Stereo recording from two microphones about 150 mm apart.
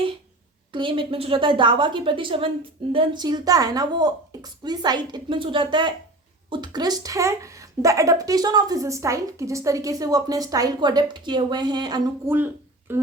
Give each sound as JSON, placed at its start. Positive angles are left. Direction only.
{"t": 0.7, "sound": "a woman's voice", "side_deg": -35}
{"t": 12.2, "sound": "speech", "side_deg": -15}